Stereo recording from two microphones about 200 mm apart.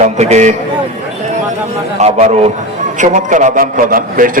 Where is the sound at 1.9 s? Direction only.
35° right (ahead or behind).